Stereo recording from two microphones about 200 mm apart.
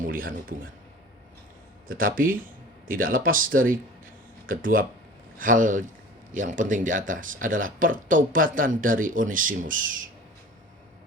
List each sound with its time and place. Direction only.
0.0 s a man's voice: 45° right (ahead or behind)
1.9 s speech: 45° right (ahead or behind)